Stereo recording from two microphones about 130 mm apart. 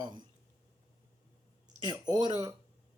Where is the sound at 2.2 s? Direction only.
35° right (ahead or behind).